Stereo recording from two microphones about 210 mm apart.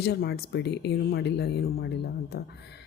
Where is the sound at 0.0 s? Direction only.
50° left (ahead or behind).